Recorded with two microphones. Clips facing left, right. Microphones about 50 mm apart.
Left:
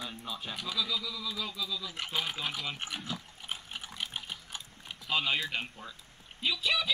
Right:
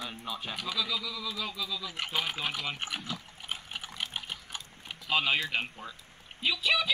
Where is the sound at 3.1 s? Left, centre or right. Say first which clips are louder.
Even; centre.